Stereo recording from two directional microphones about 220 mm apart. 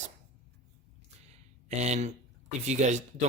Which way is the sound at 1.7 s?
30° right (ahead or behind).